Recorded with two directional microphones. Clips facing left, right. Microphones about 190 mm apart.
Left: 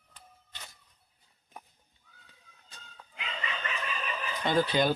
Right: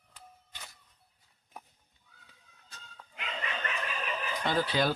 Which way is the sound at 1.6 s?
5° right (ahead or behind).